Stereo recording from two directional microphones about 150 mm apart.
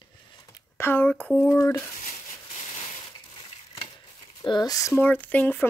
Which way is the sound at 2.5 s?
45° left (ahead or behind).